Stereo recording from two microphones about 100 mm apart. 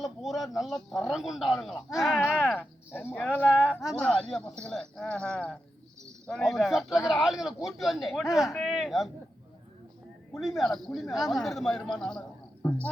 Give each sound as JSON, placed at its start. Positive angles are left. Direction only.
{"t": 0.0, "sound": "speech", "side_deg": 0}
{"t": 2.6, "sound": "speech", "side_deg": 20}
{"t": 3.4, "sound": "speech", "side_deg": -15}
{"t": 3.9, "sound": "speech", "side_deg": 10}
{"t": 10.3, "sound": "speech", "side_deg": 0}